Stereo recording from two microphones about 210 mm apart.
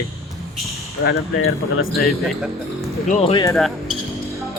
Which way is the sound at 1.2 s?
75° left (ahead or behind).